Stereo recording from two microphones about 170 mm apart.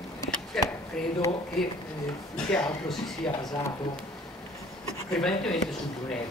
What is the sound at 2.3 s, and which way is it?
Speech, 5° left (ahead or behind).